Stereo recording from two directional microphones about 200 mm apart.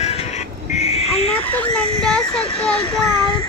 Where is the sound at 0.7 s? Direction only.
30° left (ahead or behind).